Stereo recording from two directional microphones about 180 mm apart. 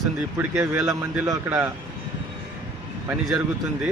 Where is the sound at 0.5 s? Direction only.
10° right (ahead or behind).